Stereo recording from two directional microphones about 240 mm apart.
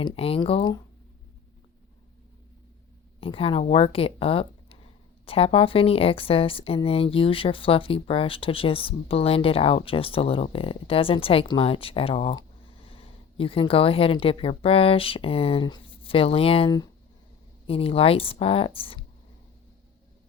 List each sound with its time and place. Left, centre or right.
0.0 s a woman's voice: left
3.2 s a woman's voice: left